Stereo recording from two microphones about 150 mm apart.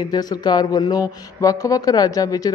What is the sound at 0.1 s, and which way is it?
A woman's voice, 25° left (ahead or behind).